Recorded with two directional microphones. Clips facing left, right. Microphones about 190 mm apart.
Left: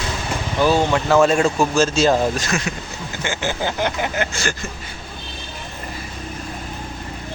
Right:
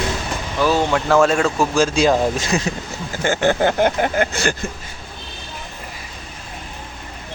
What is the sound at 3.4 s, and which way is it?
Speech, 60° right (ahead or behind).